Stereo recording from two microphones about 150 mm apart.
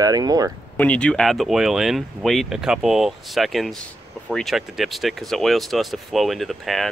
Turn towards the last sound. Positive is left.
turn(degrees=0)  # may be behind; listen again after turning